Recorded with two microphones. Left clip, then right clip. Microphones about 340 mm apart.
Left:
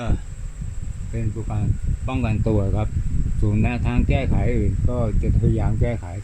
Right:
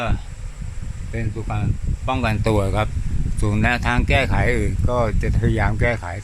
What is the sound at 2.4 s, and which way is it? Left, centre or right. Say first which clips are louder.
Speech: right 3 dB; right.